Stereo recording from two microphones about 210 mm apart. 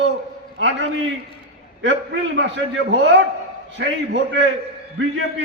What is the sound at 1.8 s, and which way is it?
A man's voice, 60° right (ahead or behind).